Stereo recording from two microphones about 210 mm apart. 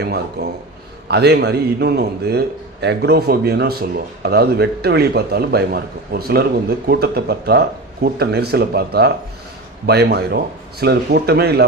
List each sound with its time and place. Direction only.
0.0 s speech: 50° right (ahead or behind)